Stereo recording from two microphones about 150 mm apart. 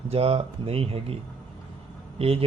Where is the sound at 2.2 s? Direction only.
40° right (ahead or behind).